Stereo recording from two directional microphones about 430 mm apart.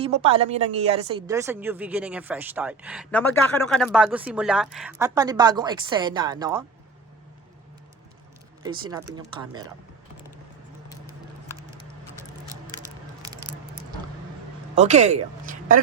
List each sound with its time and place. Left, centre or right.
0.0 s a woman's voice: centre
8.6 s speech: centre
12.8 s a sound: centre
14.8 s speech: centre